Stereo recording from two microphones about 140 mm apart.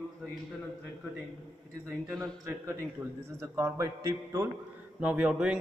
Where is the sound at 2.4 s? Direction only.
20° right (ahead or behind).